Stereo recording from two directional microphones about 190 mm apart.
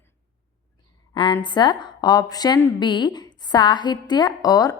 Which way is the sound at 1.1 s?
25° left (ahead or behind).